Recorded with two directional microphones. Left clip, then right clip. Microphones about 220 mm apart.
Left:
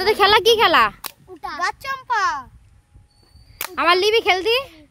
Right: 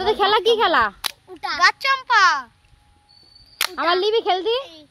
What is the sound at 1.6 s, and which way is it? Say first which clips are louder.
Speech: right 8 dB; 20° left (ahead or behind).